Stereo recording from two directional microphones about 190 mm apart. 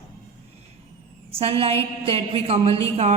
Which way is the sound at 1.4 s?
30° right (ahead or behind).